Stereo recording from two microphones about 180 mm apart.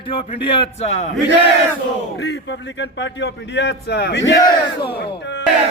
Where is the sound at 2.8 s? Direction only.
85° left.